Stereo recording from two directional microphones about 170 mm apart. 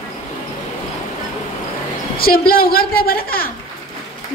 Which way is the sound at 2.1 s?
60° left (ahead or behind).